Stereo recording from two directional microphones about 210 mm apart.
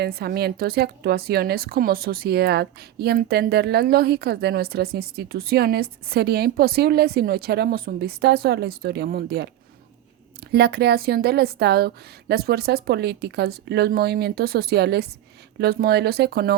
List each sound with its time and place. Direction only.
0.0 s a woman's voice: 50° right (ahead or behind)